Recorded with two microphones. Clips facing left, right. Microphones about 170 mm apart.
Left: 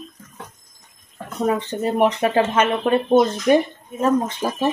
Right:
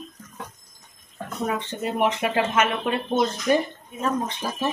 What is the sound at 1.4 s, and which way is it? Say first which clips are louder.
Speech: left 6 dB; 40° left (ahead or behind).